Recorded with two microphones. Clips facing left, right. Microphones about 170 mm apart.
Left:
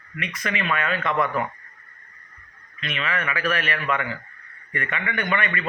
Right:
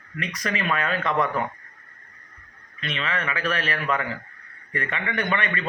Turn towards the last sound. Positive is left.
turn(degrees=-35)  # may be behind; listen again after turning